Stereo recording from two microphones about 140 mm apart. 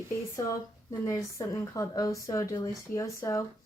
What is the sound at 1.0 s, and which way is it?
Speech, 20° left (ahead or behind).